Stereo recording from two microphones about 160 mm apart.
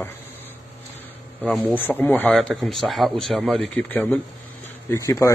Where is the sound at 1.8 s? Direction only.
10° left (ahead or behind).